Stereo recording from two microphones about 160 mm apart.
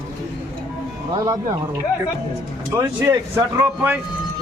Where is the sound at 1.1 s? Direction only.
25° right (ahead or behind).